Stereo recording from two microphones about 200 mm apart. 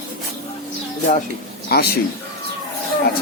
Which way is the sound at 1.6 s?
50° left (ahead or behind).